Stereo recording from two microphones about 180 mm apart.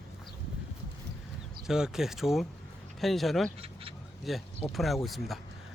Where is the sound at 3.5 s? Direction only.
30° right (ahead or behind).